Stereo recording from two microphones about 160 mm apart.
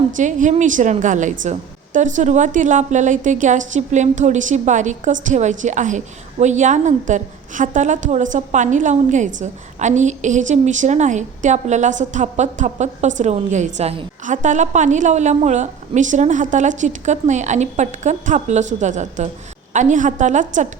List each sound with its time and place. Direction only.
0.2 s a woman's voice: 50° right (ahead or behind)